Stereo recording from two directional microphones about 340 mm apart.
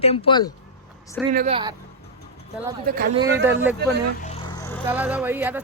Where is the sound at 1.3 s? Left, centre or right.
Right.